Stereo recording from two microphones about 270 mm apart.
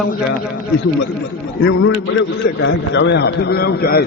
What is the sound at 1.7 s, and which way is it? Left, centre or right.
A man's voice, left.